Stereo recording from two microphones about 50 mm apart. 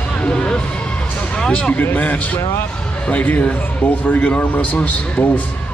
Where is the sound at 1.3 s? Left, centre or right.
Left.